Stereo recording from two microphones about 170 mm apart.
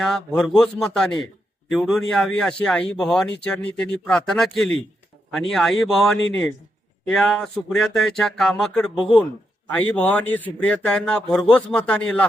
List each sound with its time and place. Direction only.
0.0 s speech: centre (ahead or behind)
6.1 s speech: 90° left
7.1 s a man's voice: 5° left (ahead or behind)